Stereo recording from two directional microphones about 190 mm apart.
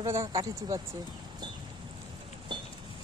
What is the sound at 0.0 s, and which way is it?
Speech, 15° right (ahead or behind).